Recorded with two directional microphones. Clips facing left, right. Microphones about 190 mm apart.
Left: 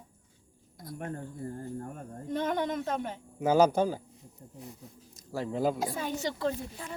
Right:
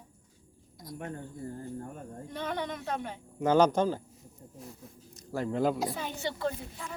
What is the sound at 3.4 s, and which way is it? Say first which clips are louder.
Speech: even; 5° left (ahead or behind).